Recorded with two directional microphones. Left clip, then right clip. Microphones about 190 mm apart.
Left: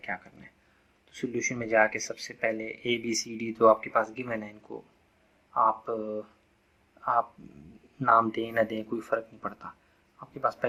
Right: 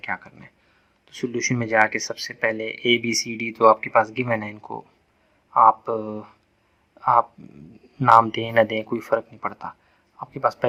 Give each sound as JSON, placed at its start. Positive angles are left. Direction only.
{"t": 0.0, "sound": "a sound", "side_deg": -45}
{"t": 1.1, "sound": "speech", "side_deg": -45}
{"t": 5.5, "sound": "a man's voice", "side_deg": -45}